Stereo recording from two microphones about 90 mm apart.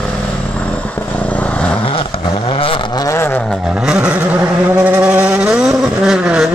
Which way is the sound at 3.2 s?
25° left (ahead or behind).